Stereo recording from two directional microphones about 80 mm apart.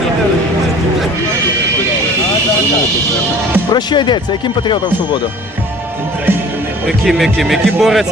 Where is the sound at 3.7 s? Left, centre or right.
Left.